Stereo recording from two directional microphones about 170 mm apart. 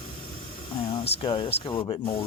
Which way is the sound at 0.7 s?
30° left (ahead or behind).